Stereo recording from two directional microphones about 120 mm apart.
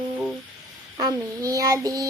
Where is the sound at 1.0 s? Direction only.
30° right (ahead or behind).